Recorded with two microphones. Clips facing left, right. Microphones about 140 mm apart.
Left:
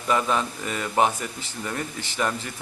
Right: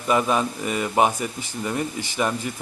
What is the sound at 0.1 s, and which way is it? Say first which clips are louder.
Speech: right 3 dB; 15° right (ahead or behind).